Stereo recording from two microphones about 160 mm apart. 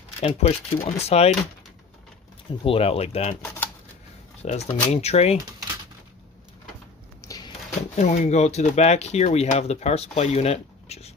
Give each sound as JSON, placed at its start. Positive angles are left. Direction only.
{"t": 0.2, "sound": "speech", "side_deg": 40}
{"t": 2.6, "sound": "speech", "side_deg": 35}
{"t": 4.4, "sound": "speech", "side_deg": 45}
{"t": 7.2, "sound": "a sound", "side_deg": 25}
{"t": 7.9, "sound": "speech", "side_deg": 45}